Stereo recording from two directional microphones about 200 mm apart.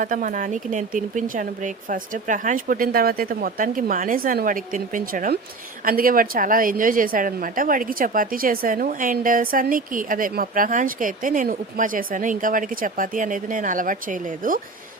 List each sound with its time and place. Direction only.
0.0 s a woman's voice: 40° right (ahead or behind)